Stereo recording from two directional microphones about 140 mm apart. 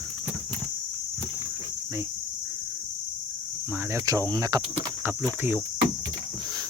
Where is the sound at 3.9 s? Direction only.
25° right (ahead or behind).